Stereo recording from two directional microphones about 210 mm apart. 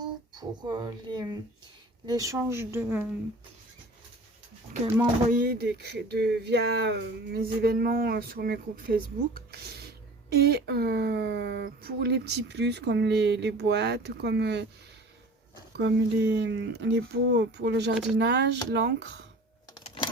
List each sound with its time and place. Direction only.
0.3 s speech: 20° right (ahead or behind)
5.3 s speech: 45° right (ahead or behind)
15.8 s speech: 55° right (ahead or behind)
19.7 s a sound: 25° left (ahead or behind)